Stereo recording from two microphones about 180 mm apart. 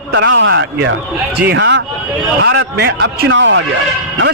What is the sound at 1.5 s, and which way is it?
A man's voice, 75° right (ahead or behind).